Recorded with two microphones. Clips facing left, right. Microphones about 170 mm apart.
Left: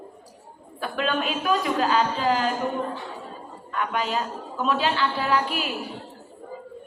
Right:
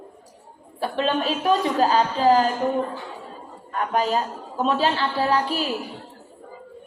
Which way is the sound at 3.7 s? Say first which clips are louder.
Right 4 dB; 40° right (ahead or behind).